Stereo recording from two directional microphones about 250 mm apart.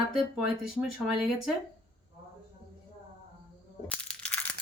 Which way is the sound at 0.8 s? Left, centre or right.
Centre.